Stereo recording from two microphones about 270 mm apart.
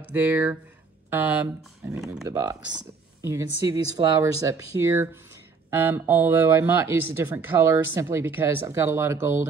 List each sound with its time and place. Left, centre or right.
0.1 s speech: centre
2.2 s speech: centre